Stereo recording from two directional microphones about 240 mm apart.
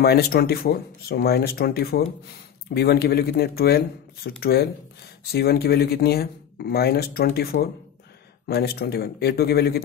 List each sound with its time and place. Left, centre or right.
0.0 s speech: left